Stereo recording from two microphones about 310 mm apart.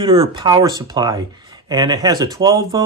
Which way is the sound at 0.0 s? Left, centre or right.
Centre.